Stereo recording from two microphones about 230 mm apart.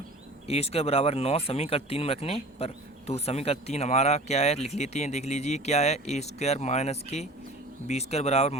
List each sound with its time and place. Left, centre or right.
0.4 s speech: left